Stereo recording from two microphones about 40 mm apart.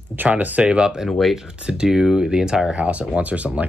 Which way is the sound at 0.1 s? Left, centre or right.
Right.